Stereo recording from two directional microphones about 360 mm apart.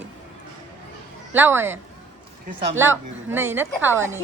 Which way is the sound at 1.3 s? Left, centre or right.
Centre.